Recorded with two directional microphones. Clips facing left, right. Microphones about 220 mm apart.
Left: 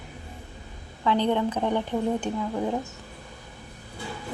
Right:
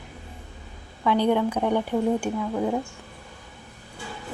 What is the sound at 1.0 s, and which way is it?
A woman's voice, 10° right (ahead or behind).